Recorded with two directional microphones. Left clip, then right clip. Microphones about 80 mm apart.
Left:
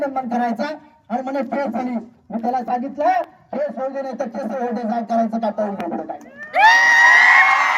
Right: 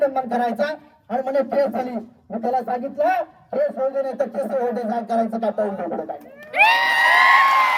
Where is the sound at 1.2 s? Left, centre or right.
Right.